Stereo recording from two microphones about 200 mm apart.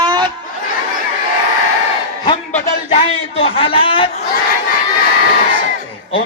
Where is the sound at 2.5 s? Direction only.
30° left (ahead or behind).